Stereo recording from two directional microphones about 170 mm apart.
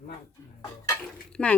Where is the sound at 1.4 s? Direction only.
5° left (ahead or behind).